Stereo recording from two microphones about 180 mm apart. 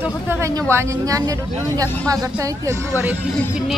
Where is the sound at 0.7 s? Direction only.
15° right (ahead or behind).